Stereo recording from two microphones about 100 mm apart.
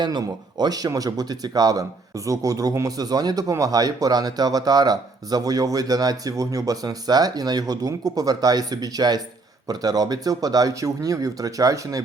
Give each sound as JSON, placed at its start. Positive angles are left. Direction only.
{"t": 0.0, "sound": "speech", "side_deg": -45}